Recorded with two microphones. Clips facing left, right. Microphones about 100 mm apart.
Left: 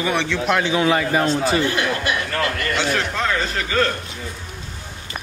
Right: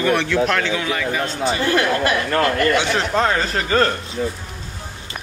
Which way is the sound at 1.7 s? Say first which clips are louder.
Right 4 dB; 40° right (ahead or behind).